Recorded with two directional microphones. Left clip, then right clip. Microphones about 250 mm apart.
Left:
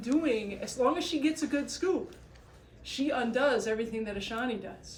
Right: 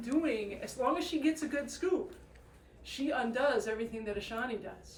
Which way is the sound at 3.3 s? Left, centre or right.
Left.